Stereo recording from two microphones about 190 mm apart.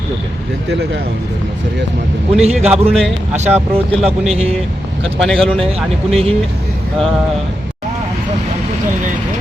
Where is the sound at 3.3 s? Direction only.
35° right (ahead or behind).